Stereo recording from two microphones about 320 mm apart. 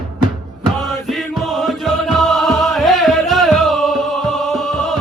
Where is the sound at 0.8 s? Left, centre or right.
Centre.